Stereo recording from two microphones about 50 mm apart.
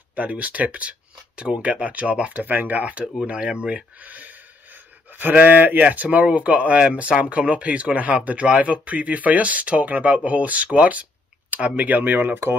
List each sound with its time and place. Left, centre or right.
0.1 s speech: right
4.0 s speech: right